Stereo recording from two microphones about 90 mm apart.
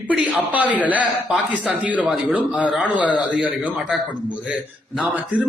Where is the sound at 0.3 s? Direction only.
15° right (ahead or behind).